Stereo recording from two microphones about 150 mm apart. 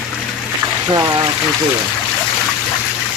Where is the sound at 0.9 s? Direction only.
25° right (ahead or behind).